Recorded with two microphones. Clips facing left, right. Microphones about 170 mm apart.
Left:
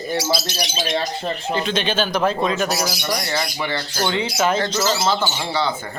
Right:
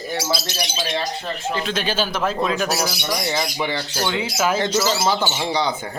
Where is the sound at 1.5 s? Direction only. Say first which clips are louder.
Left 2 dB; 5° right (ahead or behind).